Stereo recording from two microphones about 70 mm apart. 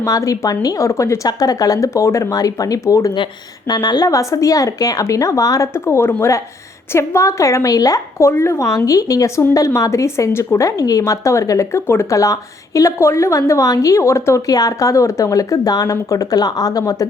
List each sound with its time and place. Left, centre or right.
0.0 s a woman's voice: left
1.3 s speech: left
3.7 s a woman's voice: left
4.1 s a woman's voice: left
5.7 s a woman's voice: left
8.3 s a woman's voice: left
9.6 s a woman's voice: left